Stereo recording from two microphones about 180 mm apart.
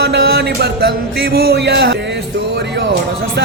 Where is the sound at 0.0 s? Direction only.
65° right (ahead or behind).